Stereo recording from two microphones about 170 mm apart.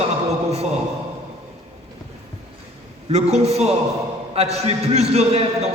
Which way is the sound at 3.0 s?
40° right (ahead or behind).